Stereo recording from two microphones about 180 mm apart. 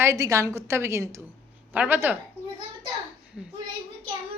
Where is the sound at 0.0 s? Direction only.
15° right (ahead or behind).